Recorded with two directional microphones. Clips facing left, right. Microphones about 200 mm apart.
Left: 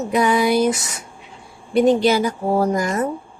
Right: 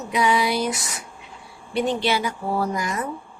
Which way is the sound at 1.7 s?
45° left (ahead or behind).